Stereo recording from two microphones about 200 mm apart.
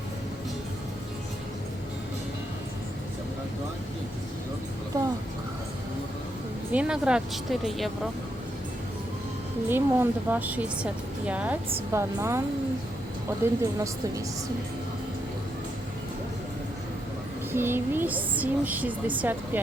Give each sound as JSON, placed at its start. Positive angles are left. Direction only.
{"t": 6.7, "sound": "speech", "side_deg": -5}
{"t": 9.6, "sound": "speech", "side_deg": -10}
{"t": 13.4, "sound": "speech", "side_deg": -15}
{"t": 17.5, "sound": "speech", "side_deg": -10}